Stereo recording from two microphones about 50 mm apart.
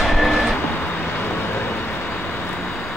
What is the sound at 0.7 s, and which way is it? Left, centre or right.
Vehicle, left.